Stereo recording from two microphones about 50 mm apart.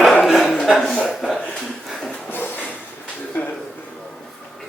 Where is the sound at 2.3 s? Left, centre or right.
Left.